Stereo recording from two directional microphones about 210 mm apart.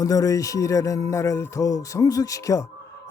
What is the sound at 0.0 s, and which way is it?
Speech, 15° left (ahead or behind).